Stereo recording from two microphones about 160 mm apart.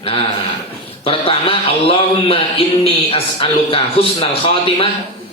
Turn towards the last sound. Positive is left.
turn(degrees=35)  # may be behind; listen again after turning